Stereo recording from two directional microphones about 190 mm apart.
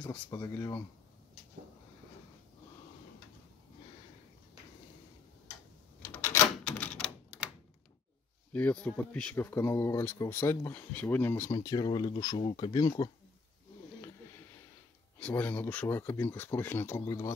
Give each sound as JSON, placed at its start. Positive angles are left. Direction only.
{"t": 0.1, "sound": "speech", "side_deg": 15}
{"t": 6.0, "sound": "typewriter", "side_deg": 10}
{"t": 8.5, "sound": "speech", "side_deg": 5}
{"t": 15.1, "sound": "speech", "side_deg": 10}